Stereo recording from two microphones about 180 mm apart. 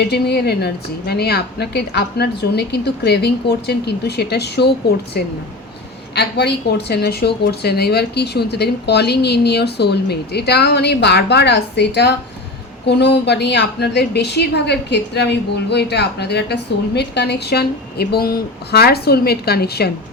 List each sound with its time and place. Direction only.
0.1 s a woman's voice: 65° left (ahead or behind)
6.1 s a woman's voice: 65° left (ahead or behind)